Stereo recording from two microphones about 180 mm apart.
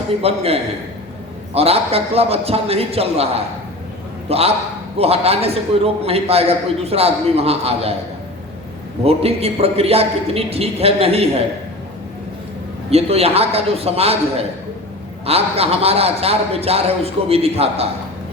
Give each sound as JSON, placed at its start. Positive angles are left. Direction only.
{"t": 0.2, "sound": "a man's voice", "side_deg": -35}
{"t": 9.0, "sound": "a man's voice", "side_deg": -35}
{"t": 12.9, "sound": "a man's voice", "side_deg": -35}